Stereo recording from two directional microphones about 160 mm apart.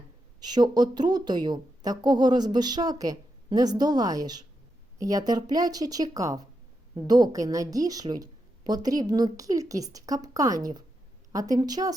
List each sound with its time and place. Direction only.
0.3 s speech: 25° right (ahead or behind)